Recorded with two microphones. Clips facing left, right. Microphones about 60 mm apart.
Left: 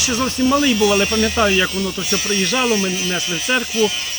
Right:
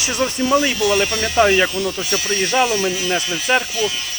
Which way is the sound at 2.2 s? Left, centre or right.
Right.